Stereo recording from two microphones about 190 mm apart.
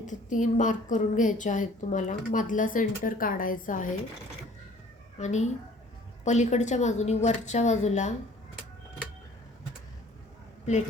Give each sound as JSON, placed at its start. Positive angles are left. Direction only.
{"t": 0.0, "sound": "a woman's voice", "side_deg": 40}
{"t": 5.2, "sound": "a woman's voice", "side_deg": 35}